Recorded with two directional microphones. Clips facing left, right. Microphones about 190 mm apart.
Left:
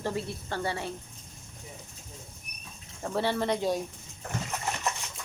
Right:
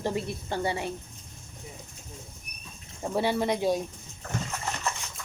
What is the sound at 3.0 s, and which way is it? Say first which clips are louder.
Speech: right 2 dB; 15° right (ahead or behind).